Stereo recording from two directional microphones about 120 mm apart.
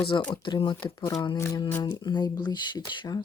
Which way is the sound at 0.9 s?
30° left (ahead or behind).